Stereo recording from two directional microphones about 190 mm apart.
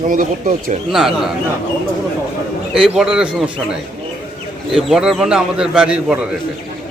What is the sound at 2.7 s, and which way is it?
Speech, 5° right (ahead or behind).